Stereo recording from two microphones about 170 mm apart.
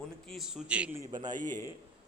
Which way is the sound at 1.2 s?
50° right (ahead or behind).